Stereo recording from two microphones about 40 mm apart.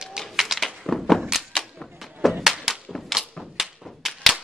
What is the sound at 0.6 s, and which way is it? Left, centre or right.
Thunk, centre.